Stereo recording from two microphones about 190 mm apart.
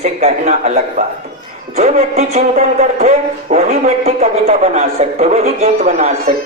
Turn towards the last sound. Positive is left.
turn(degrees=-40)  # may be behind; listen again after turning